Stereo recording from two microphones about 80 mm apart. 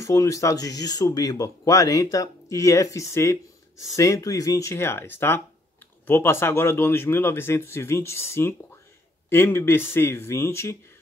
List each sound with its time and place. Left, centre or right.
0.0 s speech: left